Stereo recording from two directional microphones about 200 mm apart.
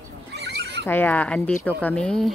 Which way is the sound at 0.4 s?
55° right (ahead or behind).